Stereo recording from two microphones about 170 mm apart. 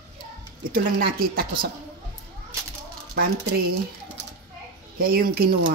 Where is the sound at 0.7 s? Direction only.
60° right (ahead or behind).